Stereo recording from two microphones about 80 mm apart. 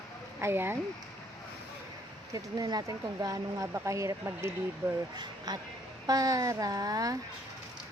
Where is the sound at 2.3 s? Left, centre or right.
Right.